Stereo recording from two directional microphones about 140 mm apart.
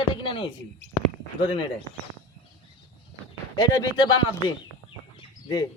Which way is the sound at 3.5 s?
30° left (ahead or behind).